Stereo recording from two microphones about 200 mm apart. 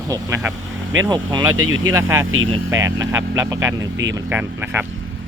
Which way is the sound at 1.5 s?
90° right.